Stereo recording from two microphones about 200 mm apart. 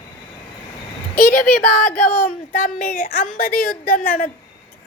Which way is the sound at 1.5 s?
5° left (ahead or behind).